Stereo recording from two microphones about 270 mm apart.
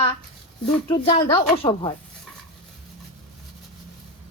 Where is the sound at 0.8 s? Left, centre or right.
Centre.